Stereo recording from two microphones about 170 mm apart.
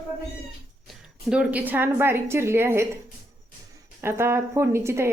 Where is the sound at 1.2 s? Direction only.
5° right (ahead or behind).